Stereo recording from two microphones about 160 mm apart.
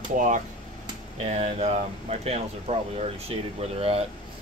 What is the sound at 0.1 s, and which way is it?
Speech, 55° right (ahead or behind).